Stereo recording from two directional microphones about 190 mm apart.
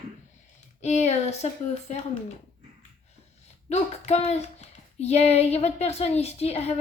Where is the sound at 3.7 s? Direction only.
35° left (ahead or behind).